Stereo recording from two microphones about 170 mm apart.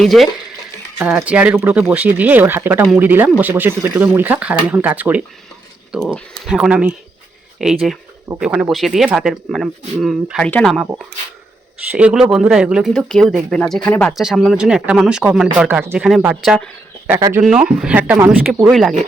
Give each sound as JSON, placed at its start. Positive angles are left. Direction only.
{"t": 0.0, "sound": "speech", "side_deg": 0}
{"t": 11.9, "sound": "speech", "side_deg": -5}
{"t": 17.2, "sound": "speech", "side_deg": -20}
{"t": 17.4, "sound": "speech", "side_deg": -5}
{"t": 18.7, "sound": "speech", "side_deg": 0}